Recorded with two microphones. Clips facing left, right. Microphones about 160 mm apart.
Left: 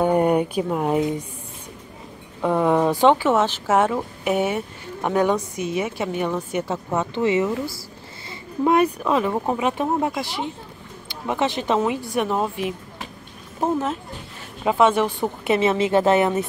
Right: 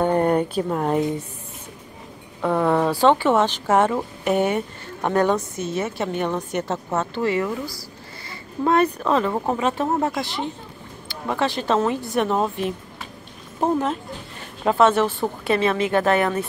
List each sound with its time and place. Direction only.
0.0 s speech: 10° left (ahead or behind)
2.4 s a woman's voice: 10° left (ahead or behind)
3.2 s a woman's voice: 5° left (ahead or behind)
7.0 s a woman's voice: 20° left (ahead or behind)
14.6 s a woman's voice: 10° left (ahead or behind)